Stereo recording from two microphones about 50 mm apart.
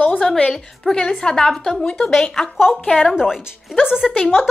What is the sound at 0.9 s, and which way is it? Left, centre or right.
Speech, centre.